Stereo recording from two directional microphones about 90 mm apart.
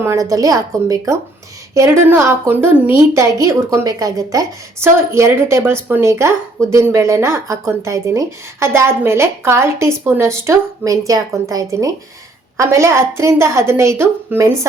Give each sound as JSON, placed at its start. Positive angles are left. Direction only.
{"t": 0.0, "sound": "a woman's voice", "side_deg": -35}
{"t": 3.2, "sound": "speech", "side_deg": -35}
{"t": 4.8, "sound": "speech", "side_deg": -30}